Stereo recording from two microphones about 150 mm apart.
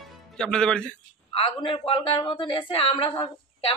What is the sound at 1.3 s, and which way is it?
A woman's voice, 40° left (ahead or behind).